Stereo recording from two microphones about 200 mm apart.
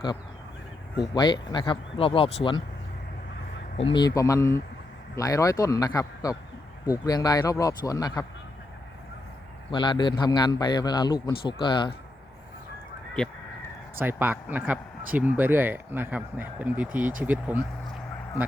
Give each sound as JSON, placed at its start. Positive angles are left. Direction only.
{"t": 1.1, "sound": "a man's voice", "side_deg": 20}
{"t": 3.8, "sound": "speech", "side_deg": 25}
{"t": 9.7, "sound": "a man's voice", "side_deg": 20}
{"t": 14.0, "sound": "speech", "side_deg": -10}